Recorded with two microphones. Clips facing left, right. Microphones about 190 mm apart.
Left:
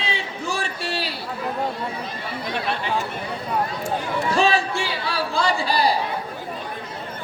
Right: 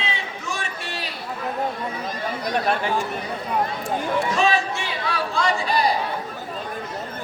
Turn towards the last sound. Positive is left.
turn(degrees=30)  # may be behind; listen again after turning